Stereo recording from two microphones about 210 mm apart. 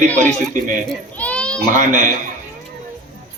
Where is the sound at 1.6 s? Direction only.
35° right (ahead or behind).